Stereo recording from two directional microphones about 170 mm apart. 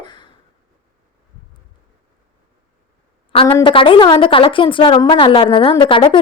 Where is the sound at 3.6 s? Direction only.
30° left (ahead or behind).